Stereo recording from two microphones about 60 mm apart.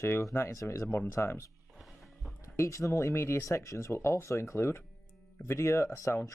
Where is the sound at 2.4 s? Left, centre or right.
Left.